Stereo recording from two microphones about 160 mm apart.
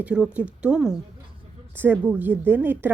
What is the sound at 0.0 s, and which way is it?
A woman's voice, 5° right (ahead or behind).